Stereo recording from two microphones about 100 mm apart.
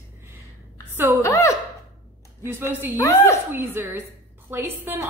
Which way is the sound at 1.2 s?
35° left (ahead or behind).